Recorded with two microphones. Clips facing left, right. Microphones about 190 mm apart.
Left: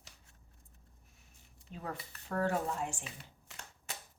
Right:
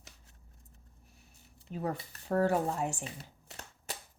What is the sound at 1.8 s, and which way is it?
Speech, 35° right (ahead or behind).